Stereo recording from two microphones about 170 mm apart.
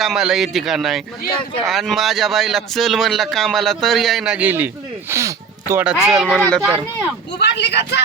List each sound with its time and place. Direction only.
0.0 s speech: centre (ahead or behind); by 5.8 s 15° right (ahead or behind)
5.8 s speech: 5° right (ahead or behind)
7.3 s speech: 90° left